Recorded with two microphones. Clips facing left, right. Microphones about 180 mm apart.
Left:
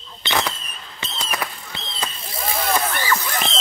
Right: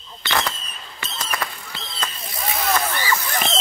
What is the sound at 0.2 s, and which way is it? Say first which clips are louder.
Fireworks: left 1 dB; 15° left (ahead or behind).